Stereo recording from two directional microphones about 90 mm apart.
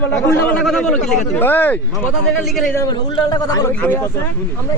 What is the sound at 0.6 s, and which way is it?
Speech, 5° left (ahead or behind).